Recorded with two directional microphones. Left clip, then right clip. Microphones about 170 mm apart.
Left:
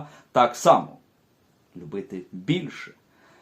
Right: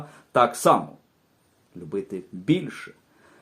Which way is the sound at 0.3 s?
35° right (ahead or behind).